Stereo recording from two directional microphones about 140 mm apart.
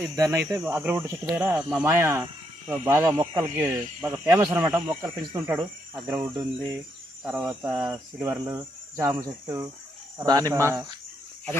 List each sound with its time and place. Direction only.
0.2 s speech: 20° right (ahead or behind)